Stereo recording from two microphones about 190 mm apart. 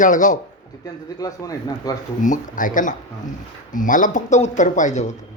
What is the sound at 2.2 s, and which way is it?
Speech, 45° left (ahead or behind).